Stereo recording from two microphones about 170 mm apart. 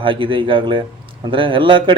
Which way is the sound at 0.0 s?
30° right (ahead or behind).